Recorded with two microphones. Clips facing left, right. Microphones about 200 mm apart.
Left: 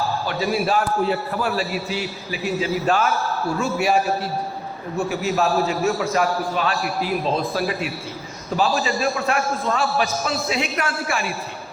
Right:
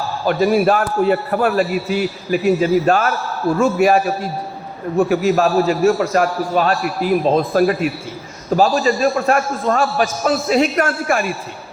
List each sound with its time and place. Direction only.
0.3 s a man's voice: 50° right (ahead or behind)